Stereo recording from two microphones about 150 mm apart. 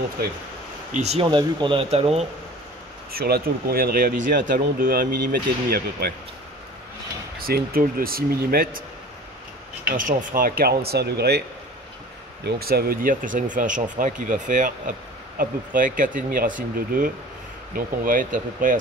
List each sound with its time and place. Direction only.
0.9 s speech: 45° right (ahead or behind)
1.2 s speech: 30° right (ahead or behind)
3.1 s speech: 90° right
7.3 s speech: 85° right
9.8 s speech: 65° right (ahead or behind); by 11.4 s 90° right
12.4 s speech: 90° right; by 18.8 s 65° right (ahead or behind)